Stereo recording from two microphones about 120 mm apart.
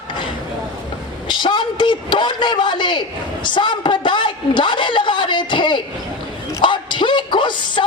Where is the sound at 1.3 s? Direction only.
40° left (ahead or behind).